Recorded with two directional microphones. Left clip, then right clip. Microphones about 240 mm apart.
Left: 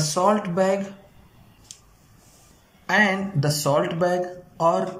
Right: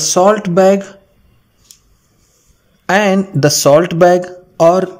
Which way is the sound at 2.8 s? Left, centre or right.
Right.